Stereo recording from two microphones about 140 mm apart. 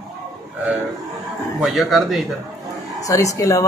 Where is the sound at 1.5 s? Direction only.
Centre (ahead or behind).